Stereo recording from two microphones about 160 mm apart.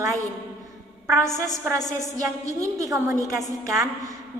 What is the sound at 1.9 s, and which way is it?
A woman's voice, 20° right (ahead or behind).